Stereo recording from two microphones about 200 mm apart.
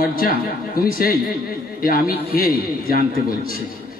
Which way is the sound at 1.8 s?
45° left (ahead or behind).